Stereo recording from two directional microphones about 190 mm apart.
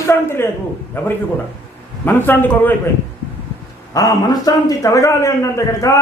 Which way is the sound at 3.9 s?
20° left (ahead or behind).